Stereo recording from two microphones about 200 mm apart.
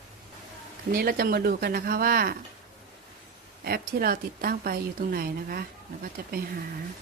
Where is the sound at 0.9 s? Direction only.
45° right (ahead or behind).